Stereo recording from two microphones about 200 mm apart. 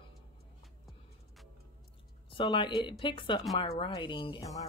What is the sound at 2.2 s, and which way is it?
Speech, 25° left (ahead or behind).